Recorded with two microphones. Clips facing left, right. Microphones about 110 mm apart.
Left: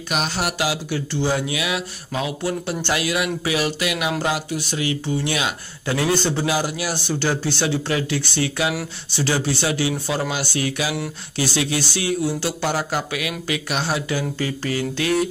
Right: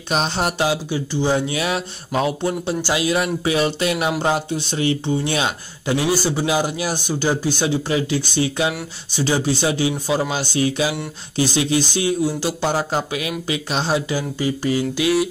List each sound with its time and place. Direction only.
0.1 s speech: 30° right (ahead or behind)
1.5 s speech: 30° right (ahead or behind)
2.4 s speech: 20° right (ahead or behind)